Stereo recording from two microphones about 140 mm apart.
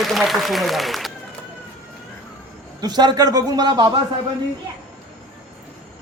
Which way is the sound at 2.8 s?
30° right (ahead or behind).